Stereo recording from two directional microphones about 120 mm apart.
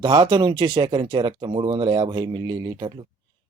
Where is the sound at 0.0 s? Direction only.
40° right (ahead or behind).